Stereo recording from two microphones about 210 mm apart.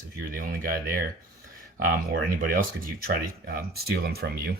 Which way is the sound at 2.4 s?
40° right (ahead or behind).